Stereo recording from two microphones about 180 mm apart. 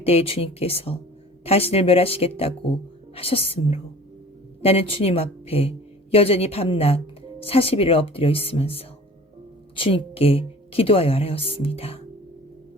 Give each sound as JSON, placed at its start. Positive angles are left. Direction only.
{"t": 0.0, "sound": "a woman's voice", "side_deg": 35}